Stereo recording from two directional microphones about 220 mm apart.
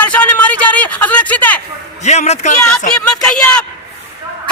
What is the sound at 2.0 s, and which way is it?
Speech, 30° left (ahead or behind).